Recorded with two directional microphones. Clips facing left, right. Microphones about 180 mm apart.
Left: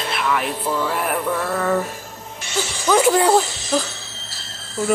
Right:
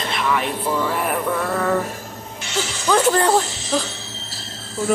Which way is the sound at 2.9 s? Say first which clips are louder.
Left 2 dB; 10° left (ahead or behind).